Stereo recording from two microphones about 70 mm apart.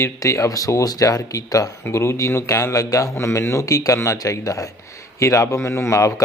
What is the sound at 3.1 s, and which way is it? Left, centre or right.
Speech, left.